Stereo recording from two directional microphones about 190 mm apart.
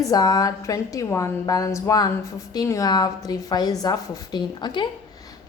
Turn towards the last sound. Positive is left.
turn(degrees=20)  # may be behind; listen again after turning